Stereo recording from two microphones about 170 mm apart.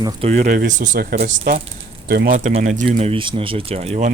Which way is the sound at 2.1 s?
60° right (ahead or behind).